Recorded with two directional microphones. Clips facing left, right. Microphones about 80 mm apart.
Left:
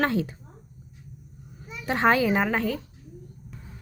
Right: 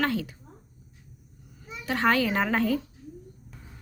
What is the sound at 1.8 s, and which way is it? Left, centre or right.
Speech, left.